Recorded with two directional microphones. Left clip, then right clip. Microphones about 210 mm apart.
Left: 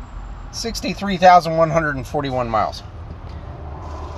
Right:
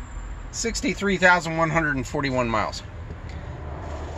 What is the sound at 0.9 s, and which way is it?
Speech, 20° left (ahead or behind).